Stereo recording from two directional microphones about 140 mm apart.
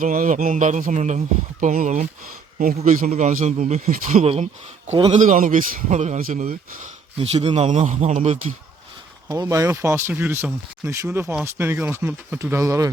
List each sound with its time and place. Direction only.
0.0 s speech: 70° right (ahead or behind)
4.2 s a man's voice: 45° right (ahead or behind)
5.1 s speech: 60° right (ahead or behind)
6.1 s speech: 80° right
7.2 s a man's voice: 45° right (ahead or behind)
9.3 s speech: 25° right (ahead or behind)